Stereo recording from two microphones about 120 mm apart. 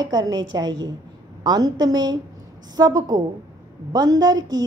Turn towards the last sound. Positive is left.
turn(degrees=-35)  # may be behind; listen again after turning